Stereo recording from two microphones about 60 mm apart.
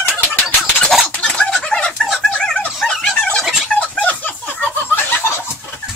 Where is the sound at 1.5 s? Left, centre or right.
Centre.